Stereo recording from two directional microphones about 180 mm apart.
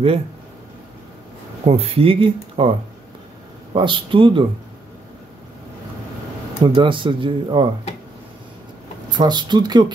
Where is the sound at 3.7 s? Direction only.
30° right (ahead or behind).